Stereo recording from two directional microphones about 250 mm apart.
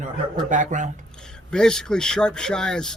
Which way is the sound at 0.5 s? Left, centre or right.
Right.